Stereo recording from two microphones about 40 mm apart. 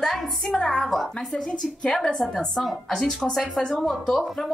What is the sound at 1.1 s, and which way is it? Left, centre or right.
A woman's voice, left.